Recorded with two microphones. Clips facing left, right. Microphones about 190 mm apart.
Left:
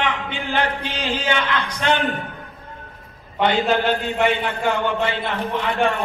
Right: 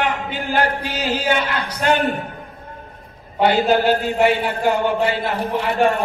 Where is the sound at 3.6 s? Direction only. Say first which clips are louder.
Right 3 dB; 5° right (ahead or behind).